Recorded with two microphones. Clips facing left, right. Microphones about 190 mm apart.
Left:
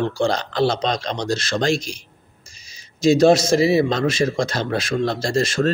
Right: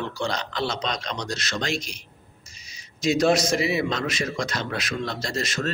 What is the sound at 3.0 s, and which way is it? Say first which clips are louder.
A man's voice: left 7 dB; 30° left (ahead or behind).